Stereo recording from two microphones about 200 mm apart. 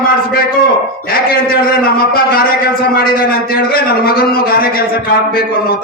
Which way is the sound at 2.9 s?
50° left (ahead or behind).